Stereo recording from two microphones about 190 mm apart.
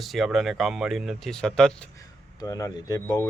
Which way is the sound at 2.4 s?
20° left (ahead or behind).